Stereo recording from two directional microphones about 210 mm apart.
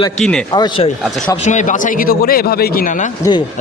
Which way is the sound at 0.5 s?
25° left (ahead or behind).